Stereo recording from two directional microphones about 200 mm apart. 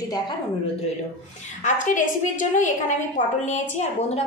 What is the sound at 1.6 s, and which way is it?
A woman's voice, 40° left (ahead or behind).